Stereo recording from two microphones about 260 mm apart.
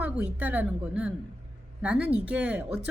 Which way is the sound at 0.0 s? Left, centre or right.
Centre.